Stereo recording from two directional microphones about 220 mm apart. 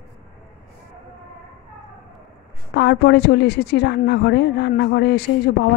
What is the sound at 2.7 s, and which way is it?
A woman's voice, 50° left (ahead or behind).